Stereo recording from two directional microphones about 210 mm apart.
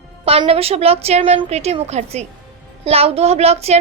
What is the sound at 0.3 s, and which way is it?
A woman's voice, 30° right (ahead or behind).